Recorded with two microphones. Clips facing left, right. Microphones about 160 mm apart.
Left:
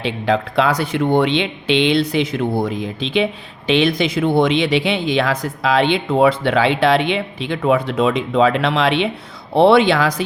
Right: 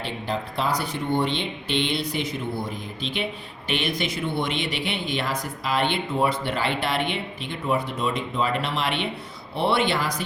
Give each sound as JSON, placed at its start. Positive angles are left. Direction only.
{"t": 0.0, "sound": "speech", "side_deg": 80}